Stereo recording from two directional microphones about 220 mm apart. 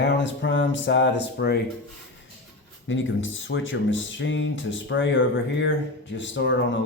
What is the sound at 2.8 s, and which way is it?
Speech, 60° left (ahead or behind).